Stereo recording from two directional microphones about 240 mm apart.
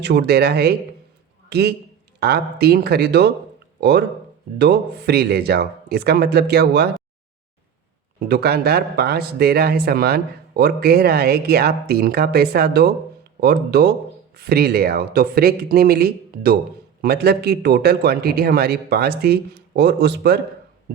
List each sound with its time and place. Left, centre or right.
0.0 s a man's voice: right
8.3 s speech: right